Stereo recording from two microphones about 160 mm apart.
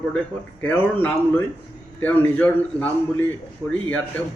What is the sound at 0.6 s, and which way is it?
Speech, 10° left (ahead or behind).